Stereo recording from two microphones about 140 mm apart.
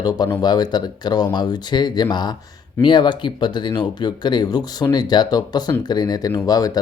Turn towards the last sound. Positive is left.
turn(degrees=25)  # may be behind; listen again after turning